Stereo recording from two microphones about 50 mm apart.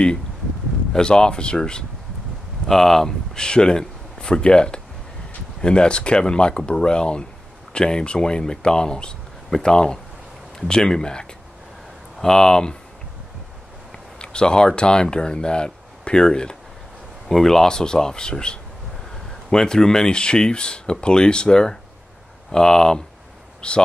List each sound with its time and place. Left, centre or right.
0.9 s speech: centre
13.9 s speech: centre